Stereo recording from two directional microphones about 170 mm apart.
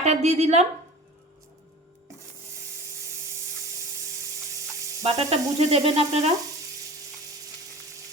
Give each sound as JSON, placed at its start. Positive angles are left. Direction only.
{"t": 0.0, "sound": "sizzle", "side_deg": -40}
{"t": 5.0, "sound": "sizzle", "side_deg": -40}